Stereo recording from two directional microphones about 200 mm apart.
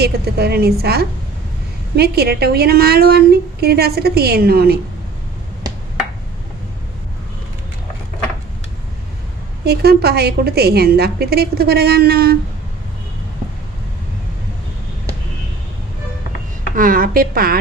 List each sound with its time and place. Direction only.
0.0 s a woman's voice: 55° right (ahead or behind)
9.6 s a woman's voice: 50° right (ahead or behind)
16.7 s a woman's voice: 45° right (ahead or behind)